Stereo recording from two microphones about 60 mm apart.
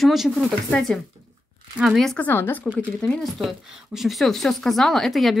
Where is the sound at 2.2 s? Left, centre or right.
Left.